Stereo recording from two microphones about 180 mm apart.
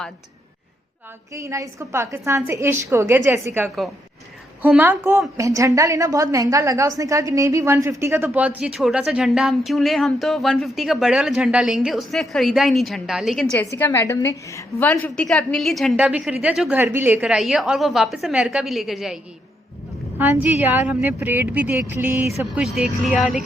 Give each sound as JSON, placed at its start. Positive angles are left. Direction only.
{"t": 1.3, "sound": "a woman's voice", "side_deg": -15}
{"t": 13.7, "sound": "a woman's voice", "side_deg": 15}
{"t": 14.8, "sound": "a woman's voice", "side_deg": 5}